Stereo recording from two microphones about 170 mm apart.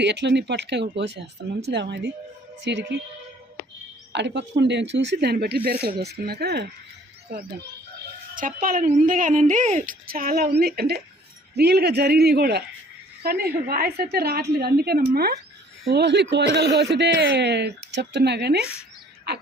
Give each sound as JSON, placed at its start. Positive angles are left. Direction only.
{"t": 0.0, "sound": "speech", "side_deg": -90}
{"t": 4.1, "sound": "a woman's voice", "side_deg": -90}
{"t": 8.4, "sound": "a woman's voice", "side_deg": -55}
{"t": 15.9, "sound": "speech", "side_deg": -85}